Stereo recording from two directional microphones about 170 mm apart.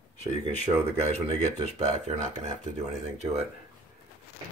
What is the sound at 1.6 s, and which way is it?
Speech, 40° right (ahead or behind).